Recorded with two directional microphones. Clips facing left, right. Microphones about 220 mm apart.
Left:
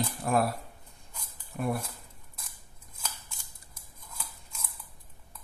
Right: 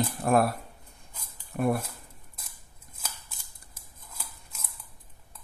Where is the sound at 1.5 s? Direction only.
55° right (ahead or behind).